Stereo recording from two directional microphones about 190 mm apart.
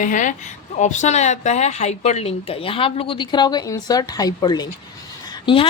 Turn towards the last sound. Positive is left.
turn(degrees=25)  # may be behind; listen again after turning